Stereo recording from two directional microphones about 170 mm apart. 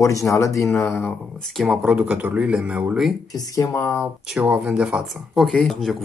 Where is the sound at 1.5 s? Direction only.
5° right (ahead or behind).